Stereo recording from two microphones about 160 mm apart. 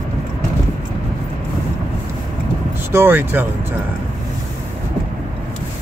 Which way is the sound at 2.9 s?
15° right (ahead or behind).